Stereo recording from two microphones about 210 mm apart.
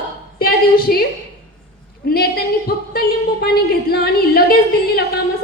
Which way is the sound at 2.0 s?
45° left (ahead or behind).